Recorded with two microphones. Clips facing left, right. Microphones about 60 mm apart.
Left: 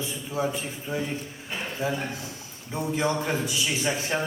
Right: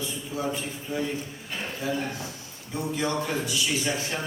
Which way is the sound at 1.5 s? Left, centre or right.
Centre.